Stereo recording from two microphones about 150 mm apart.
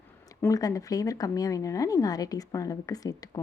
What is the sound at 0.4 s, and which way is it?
A woman's voice, 20° left (ahead or behind).